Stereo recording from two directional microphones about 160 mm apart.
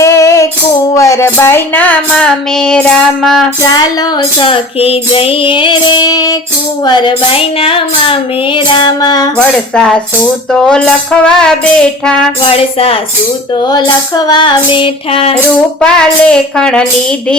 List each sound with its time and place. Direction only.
0.0 s music: 20° left (ahead or behind)
0.9 s a sound: 20° left (ahead or behind)
3.6 s speech: 25° left (ahead or behind)
4.4 s child singing: 35° left (ahead or behind)
6.8 s speech: 30° left (ahead or behind)
9.4 s music: 5° left (ahead or behind)
12.5 s child singing: 35° left (ahead or behind)
13.6 s speech: 25° left (ahead or behind)
14.3 s child singing: 30° left (ahead or behind)
15.8 s music: 5° left (ahead or behind)